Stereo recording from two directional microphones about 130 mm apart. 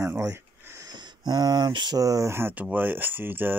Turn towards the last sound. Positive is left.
turn(degrees=-15)  # may be behind; listen again after turning